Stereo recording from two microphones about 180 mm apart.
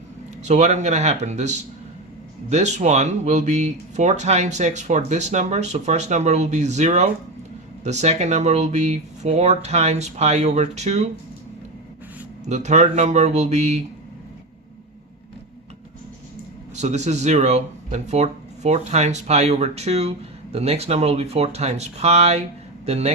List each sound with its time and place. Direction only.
0.4 s speech: 40° right (ahead or behind)
12.5 s speech: 40° right (ahead or behind)
16.7 s speech: 40° right (ahead or behind)